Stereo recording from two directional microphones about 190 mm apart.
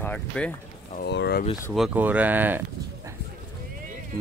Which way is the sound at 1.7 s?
5° right (ahead or behind).